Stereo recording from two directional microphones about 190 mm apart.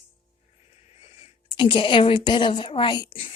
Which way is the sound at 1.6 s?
25° left (ahead or behind).